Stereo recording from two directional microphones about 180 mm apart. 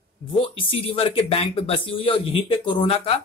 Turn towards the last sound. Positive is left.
turn(degrees=30)  # may be behind; listen again after turning